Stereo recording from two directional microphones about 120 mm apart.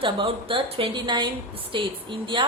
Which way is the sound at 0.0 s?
45° right (ahead or behind).